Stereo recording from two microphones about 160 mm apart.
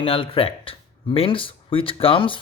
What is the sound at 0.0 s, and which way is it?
Speech, 35° left (ahead or behind).